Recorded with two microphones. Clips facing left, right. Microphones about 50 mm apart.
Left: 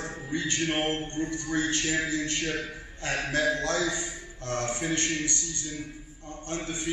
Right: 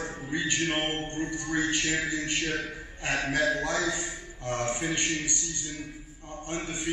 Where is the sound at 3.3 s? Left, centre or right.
Centre.